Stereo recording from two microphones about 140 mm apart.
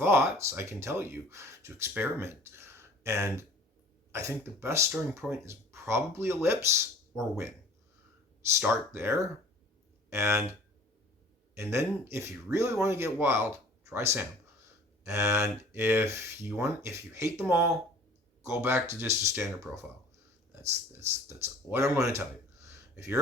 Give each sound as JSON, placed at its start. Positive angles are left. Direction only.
{"t": 0.0, "sound": "speech", "side_deg": -20}
{"t": 8.5, "sound": "speech", "side_deg": -15}
{"t": 11.5, "sound": "speech", "side_deg": -20}